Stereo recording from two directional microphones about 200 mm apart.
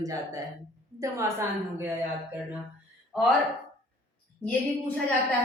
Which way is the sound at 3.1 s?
Centre (ahead or behind).